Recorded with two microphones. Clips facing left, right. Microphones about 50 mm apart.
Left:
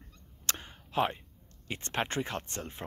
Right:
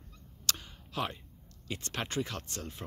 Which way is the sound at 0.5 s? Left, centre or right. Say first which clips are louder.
Even; left.